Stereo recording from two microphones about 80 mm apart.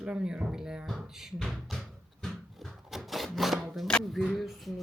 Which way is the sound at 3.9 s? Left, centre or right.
Centre.